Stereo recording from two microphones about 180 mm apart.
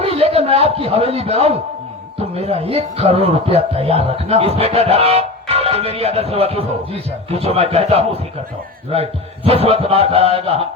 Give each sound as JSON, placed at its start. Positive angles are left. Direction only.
{"t": 0.0, "sound": "a man's voice", "side_deg": -35}